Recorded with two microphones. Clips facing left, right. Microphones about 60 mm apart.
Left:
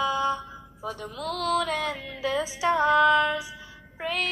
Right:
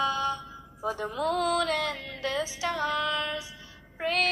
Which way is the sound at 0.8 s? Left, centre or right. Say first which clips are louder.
Right 4 dB; right.